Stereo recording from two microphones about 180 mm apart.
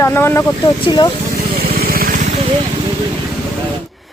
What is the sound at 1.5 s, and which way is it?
Vehicle, 55° right (ahead or behind).